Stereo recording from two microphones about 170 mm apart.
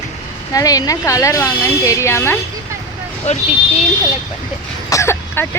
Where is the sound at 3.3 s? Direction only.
40° left (ahead or behind).